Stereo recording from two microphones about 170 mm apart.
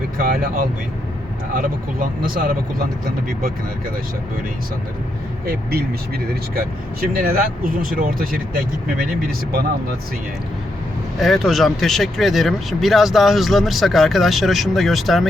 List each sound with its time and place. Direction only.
0.2 s speech: 55° right (ahead or behind)
5.5 s speech: 65° right (ahead or behind)
11.2 s speech: centre (ahead or behind)